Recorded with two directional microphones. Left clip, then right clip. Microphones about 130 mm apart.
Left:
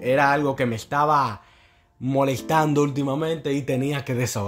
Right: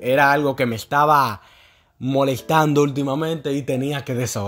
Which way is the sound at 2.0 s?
30° right (ahead or behind).